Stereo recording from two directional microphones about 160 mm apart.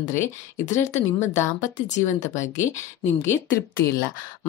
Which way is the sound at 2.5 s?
50° left (ahead or behind).